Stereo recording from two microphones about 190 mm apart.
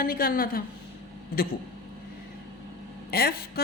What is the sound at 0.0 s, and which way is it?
Speech, 50° left (ahead or behind).